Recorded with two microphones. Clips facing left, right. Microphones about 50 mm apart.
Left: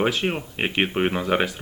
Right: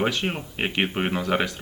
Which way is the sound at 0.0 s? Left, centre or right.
Centre.